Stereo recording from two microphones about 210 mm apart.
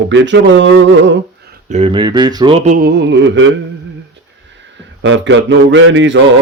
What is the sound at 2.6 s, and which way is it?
Speech, 45° right (ahead or behind).